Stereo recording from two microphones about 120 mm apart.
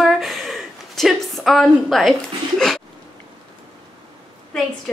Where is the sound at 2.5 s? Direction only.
5° left (ahead or behind).